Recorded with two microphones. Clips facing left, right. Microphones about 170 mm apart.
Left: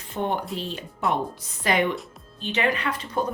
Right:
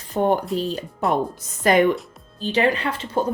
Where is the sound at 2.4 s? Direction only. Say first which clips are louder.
Right 5 dB; 35° right (ahead or behind).